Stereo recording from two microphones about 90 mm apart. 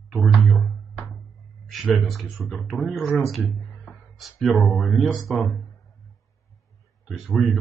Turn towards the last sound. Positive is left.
turn(degrees=0)  # may be behind; listen again after turning